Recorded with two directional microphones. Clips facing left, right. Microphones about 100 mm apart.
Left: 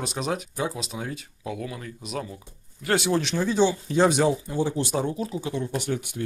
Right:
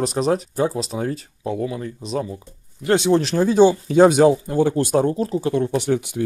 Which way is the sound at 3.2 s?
40° right (ahead or behind).